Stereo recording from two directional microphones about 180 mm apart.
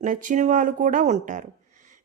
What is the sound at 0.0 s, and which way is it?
Speech, 45° right (ahead or behind).